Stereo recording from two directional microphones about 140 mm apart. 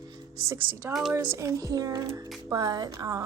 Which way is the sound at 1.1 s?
20° right (ahead or behind).